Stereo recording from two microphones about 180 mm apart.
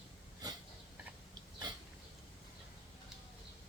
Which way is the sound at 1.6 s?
25° right (ahead or behind).